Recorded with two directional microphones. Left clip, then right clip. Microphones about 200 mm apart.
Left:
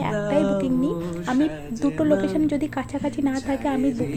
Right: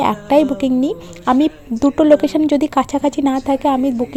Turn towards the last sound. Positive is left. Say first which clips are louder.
# right 9 dB
turn(degrees=-30)  # may be behind; listen again after turning